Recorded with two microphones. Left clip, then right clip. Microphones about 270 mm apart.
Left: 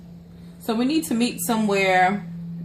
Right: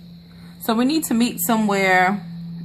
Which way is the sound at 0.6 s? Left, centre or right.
Right.